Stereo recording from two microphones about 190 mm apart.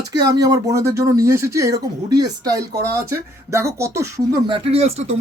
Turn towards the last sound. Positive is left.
turn(degrees=-35)  # may be behind; listen again after turning